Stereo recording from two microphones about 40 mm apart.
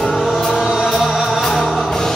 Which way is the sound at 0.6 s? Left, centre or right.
Centre.